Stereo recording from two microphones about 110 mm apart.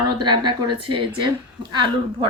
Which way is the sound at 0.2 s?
40° right (ahead or behind).